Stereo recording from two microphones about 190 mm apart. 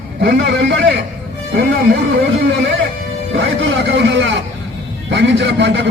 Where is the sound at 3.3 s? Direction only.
75° right (ahead or behind).